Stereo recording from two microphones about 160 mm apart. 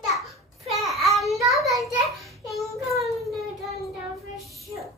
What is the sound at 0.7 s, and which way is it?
Child singing, centre (ahead or behind).